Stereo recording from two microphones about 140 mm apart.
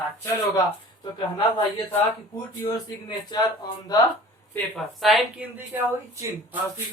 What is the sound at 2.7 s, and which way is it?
Speech, 30° left (ahead or behind).